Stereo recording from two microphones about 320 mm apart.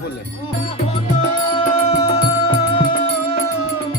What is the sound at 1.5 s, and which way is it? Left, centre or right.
Music, centre.